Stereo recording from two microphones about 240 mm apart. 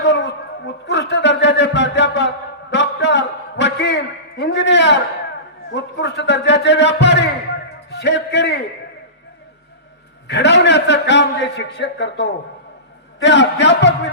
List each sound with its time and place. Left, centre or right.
0.0 s a sound: left
5.7 s a man's voice: left
10.2 s a man's voice: left